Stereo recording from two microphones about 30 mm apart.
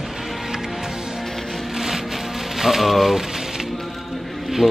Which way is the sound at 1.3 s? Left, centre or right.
Centre.